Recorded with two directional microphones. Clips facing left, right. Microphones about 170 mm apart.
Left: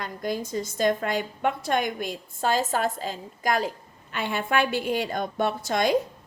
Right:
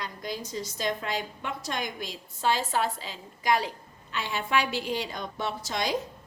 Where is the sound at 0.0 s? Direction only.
50° left (ahead or behind).